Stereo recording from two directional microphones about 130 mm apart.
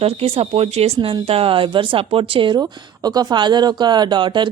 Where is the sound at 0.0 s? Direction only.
50° right (ahead or behind).